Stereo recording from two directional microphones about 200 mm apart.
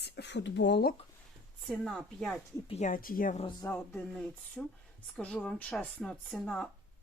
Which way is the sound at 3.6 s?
10° left (ahead or behind).